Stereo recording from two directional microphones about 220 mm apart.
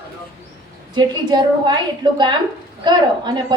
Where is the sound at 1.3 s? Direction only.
20° right (ahead or behind).